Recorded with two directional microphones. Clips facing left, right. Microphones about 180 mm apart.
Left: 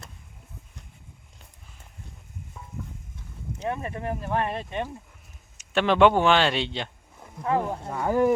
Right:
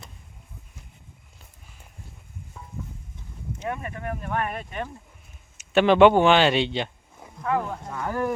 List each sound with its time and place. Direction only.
3.6 s speech: 30° left (ahead or behind)
5.5 s speech: 5° right (ahead or behind)
7.4 s speech: 25° left (ahead or behind)